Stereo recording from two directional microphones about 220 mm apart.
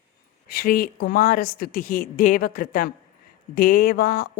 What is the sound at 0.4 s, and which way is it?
Mantra, 40° left (ahead or behind).